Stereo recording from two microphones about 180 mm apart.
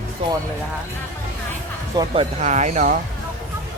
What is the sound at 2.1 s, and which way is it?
Speech, 35° right (ahead or behind).